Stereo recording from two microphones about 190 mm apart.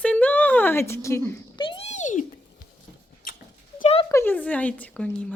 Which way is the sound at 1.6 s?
25° left (ahead or behind).